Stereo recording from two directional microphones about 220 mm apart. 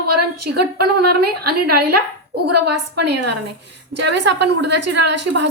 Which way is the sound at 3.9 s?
50° right (ahead or behind).